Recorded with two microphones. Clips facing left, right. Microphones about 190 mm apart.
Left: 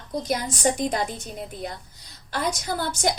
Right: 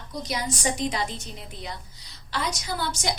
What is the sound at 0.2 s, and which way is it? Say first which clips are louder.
A woman's voice: left 4 dB; 55° left (ahead or behind).